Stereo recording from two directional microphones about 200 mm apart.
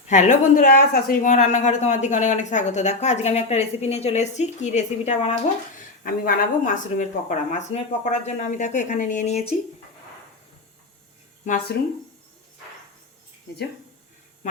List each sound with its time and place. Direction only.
0.1 s speech: 40° left (ahead or behind)